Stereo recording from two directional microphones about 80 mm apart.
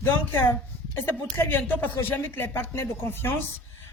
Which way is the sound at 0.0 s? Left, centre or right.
Left.